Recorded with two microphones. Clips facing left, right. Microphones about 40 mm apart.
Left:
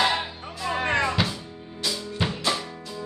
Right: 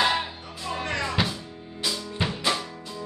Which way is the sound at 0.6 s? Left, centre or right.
Left.